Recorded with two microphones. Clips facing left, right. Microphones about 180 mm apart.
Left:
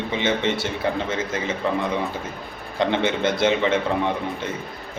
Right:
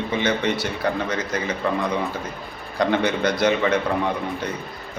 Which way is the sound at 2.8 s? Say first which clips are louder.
Right 1 dB; 25° left (ahead or behind).